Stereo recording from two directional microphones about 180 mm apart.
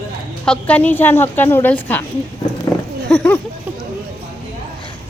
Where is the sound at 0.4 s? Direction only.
5° left (ahead or behind).